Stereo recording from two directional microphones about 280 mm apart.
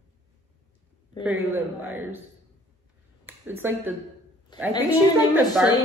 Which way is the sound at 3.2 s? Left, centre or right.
Centre.